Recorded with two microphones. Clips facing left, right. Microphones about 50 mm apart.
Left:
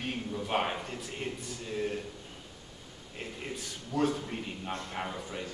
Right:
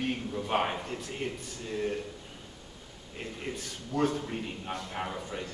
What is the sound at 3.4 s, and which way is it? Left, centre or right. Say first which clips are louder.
A man's voice: right 2 dB; centre.